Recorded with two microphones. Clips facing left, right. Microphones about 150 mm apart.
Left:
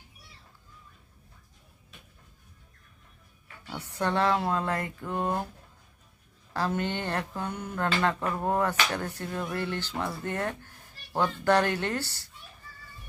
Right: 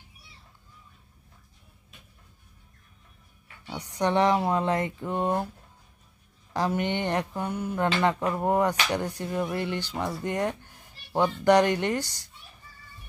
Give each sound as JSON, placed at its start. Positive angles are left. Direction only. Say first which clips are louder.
{"t": 3.6, "sound": "speech", "louder": "right 3 dB", "side_deg": -15}
{"t": 6.5, "sound": "speech", "louder": "right 3 dB", "side_deg": -15}